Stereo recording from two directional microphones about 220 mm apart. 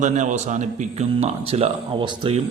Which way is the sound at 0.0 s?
35° right (ahead or behind).